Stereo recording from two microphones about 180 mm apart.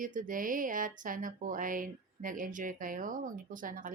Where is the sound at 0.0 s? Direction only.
45° right (ahead or behind).